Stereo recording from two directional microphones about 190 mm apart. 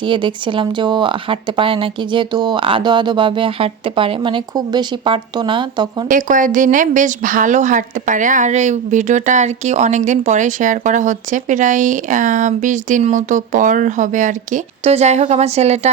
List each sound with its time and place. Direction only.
0.0 s speech: 25° right (ahead or behind)
6.1 s speech: 45° right (ahead or behind)